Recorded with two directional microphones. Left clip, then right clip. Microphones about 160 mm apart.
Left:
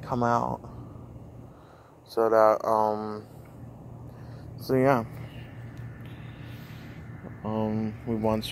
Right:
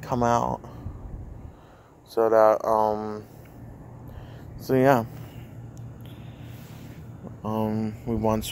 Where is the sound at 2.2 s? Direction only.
20° right (ahead or behind).